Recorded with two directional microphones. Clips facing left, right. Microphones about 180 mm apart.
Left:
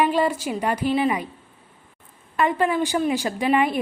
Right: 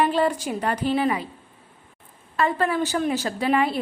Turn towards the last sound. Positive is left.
turn(degrees=15)  # may be behind; listen again after turning